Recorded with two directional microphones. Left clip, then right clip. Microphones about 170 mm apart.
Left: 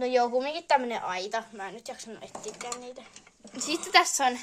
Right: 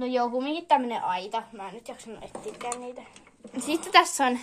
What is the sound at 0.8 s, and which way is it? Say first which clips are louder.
Speech: right 3 dB; 45° left (ahead or behind).